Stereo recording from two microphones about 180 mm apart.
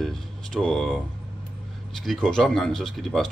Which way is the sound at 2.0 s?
Centre (ahead or behind).